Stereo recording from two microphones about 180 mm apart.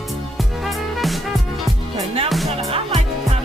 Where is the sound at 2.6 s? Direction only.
35° right (ahead or behind).